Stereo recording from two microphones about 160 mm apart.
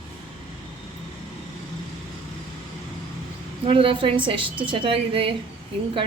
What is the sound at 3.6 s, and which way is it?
A woman's voice, 35° right (ahead or behind).